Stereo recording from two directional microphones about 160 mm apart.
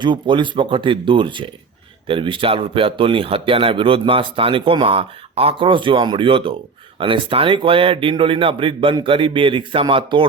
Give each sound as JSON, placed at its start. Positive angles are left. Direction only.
{"t": 0.0, "sound": "speech", "side_deg": -30}